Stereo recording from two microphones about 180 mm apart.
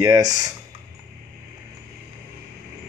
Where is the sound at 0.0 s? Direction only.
20° right (ahead or behind).